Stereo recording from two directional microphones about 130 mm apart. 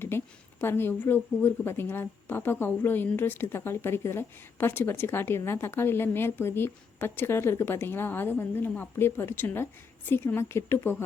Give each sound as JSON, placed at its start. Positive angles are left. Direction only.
{"t": 0.1, "sound": "a woman's voice", "side_deg": 15}